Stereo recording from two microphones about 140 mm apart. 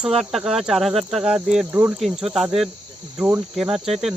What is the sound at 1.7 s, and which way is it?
Speech, 15° right (ahead or behind).